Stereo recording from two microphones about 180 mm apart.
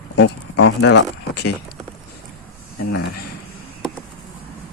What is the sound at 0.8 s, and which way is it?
Speech, 75° left (ahead or behind).